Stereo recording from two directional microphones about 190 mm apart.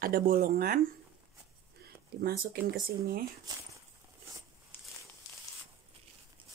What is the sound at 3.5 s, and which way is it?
Speech, 20° right (ahead or behind).